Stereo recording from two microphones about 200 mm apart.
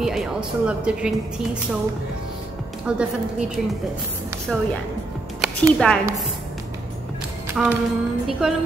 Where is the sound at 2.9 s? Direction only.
5° right (ahead or behind).